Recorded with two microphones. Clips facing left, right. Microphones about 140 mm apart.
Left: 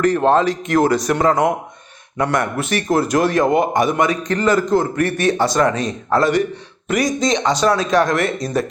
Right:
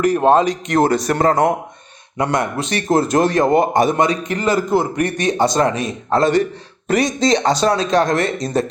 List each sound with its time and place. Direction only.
0.0 s a man's voice: 15° right (ahead or behind)
0.8 s speech: 30° right (ahead or behind)
1.0 s speech: 40° right (ahead or behind)
2.1 s speech: 20° right (ahead or behind)
2.6 s speech: 30° right (ahead or behind)
4.3 s a man's voice: 10° right (ahead or behind)